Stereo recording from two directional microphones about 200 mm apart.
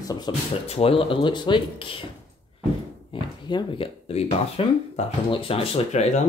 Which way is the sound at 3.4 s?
25° left (ahead or behind).